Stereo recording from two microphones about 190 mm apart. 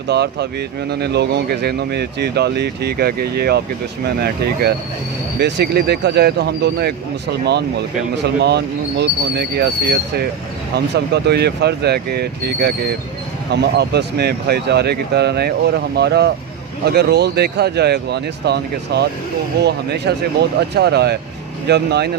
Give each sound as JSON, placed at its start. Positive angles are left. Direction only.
{"t": 0.1, "sound": "speech", "side_deg": -60}